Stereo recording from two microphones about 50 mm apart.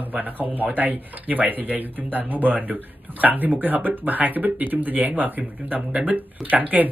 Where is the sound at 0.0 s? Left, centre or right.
Right.